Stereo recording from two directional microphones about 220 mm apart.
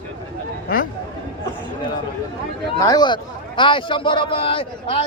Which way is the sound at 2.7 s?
20° left (ahead or behind).